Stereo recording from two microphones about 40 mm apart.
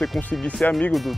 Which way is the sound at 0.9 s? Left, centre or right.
Centre.